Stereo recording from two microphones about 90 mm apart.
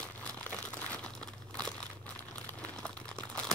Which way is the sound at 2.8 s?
10° left (ahead or behind).